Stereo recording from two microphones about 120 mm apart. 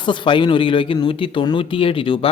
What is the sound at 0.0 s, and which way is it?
Speech, 40° left (ahead or behind).